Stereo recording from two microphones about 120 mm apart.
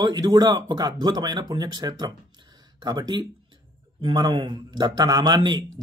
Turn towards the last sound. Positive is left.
turn(degrees=-40)  # may be behind; listen again after turning